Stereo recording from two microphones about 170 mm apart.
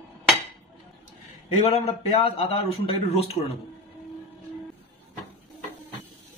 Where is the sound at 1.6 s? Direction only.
35° left (ahead or behind).